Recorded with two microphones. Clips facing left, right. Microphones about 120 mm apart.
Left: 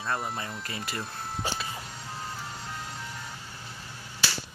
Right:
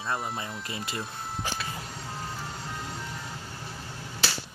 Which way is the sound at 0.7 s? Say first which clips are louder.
Right 1 dB; 25° right (ahead or behind).